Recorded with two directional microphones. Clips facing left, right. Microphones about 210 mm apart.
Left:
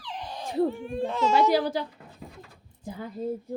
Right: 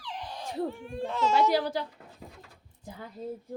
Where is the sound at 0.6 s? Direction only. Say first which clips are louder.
Left 5 dB; 20° left (ahead or behind).